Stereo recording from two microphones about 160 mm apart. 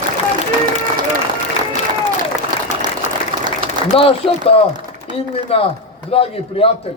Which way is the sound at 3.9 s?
35° left (ahead or behind).